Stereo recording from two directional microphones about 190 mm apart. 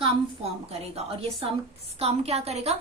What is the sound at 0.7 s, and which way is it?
A woman's voice, 30° right (ahead or behind).